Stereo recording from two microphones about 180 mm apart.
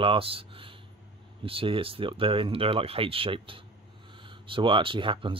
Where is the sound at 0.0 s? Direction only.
30° right (ahead or behind).